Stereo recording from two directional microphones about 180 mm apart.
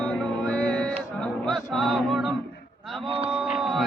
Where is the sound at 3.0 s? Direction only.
30° right (ahead or behind).